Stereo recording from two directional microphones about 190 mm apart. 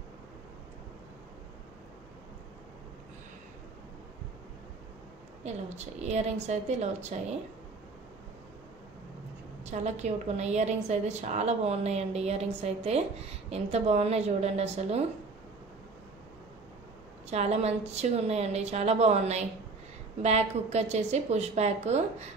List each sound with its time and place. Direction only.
5.4 s a woman's voice: 35° right (ahead or behind)
9.7 s a woman's voice: 35° right (ahead or behind)
17.3 s a woman's voice: 35° right (ahead or behind)